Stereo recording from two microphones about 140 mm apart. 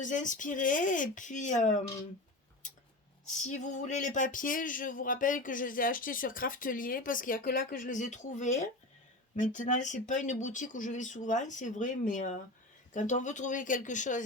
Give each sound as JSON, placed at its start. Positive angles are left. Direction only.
{"t": 0.0, "sound": "speech", "side_deg": 65}
{"t": 2.6, "sound": "a sound", "side_deg": 65}
{"t": 3.2, "sound": "speech", "side_deg": 60}